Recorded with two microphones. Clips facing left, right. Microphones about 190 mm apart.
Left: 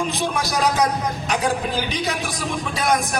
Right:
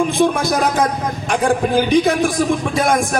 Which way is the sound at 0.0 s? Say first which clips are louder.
Right 8 dB; 55° right (ahead or behind).